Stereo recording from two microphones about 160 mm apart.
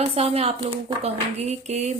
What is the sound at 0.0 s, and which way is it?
Speech, 40° right (ahead or behind).